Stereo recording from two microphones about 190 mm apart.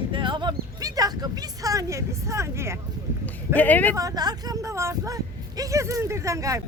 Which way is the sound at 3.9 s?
20° right (ahead or behind).